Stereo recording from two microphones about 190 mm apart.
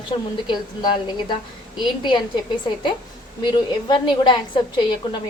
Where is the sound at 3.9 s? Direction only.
25° left (ahead or behind).